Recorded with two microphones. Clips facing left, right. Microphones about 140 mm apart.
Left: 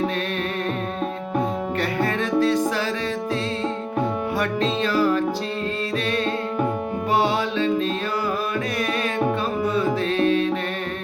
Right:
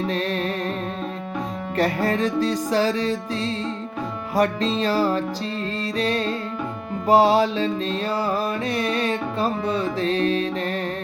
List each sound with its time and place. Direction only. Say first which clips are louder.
1.8 s music: right 5 dB; 35° right (ahead or behind)
4.4 s music: right 5 dB; 35° right (ahead or behind)
7.1 s music: right 6 dB; 35° right (ahead or behind)
8.8 s music: left 2 dB; 30° right (ahead or behind)